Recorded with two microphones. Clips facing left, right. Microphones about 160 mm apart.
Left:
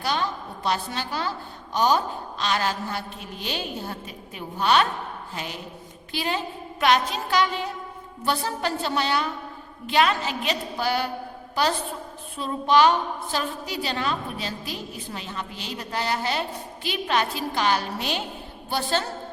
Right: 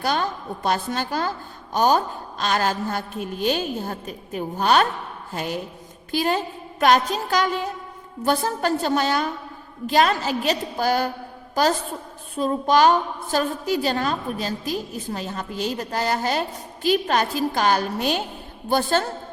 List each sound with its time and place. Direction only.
0.0 s a woman's voice: 50° right (ahead or behind)